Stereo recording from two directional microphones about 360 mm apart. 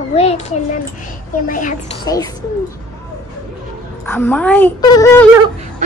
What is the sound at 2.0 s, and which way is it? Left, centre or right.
Speech, centre.